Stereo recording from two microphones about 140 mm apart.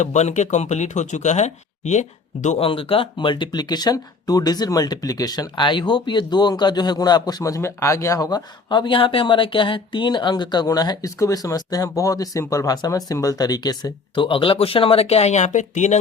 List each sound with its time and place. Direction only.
0.0 s speech: 55° left (ahead or behind)
2.6 s speech: 40° left (ahead or behind); by 16.0 s 55° left (ahead or behind)